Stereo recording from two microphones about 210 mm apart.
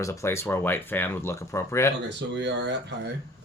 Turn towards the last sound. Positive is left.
turn(degrees=-55)  # may be behind; listen again after turning